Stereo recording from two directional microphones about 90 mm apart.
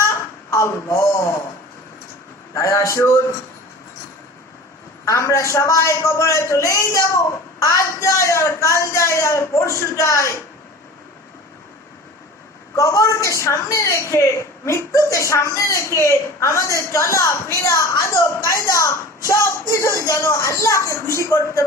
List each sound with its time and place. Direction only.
0.0 s a sound: 35° left (ahead or behind)
2.6 s a woman's voice: 35° left (ahead or behind)
5.0 s a woman's voice: 35° left (ahead or behind)
12.7 s a woman's voice: 35° left (ahead or behind)